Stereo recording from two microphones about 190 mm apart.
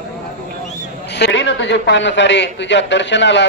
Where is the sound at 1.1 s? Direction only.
65° left (ahead or behind).